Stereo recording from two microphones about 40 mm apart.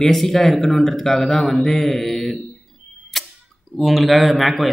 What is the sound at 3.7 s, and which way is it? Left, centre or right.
Speech, centre.